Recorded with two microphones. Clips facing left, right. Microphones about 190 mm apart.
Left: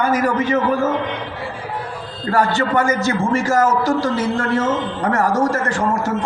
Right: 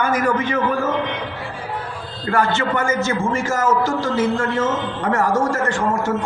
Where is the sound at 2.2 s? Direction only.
35° left (ahead or behind).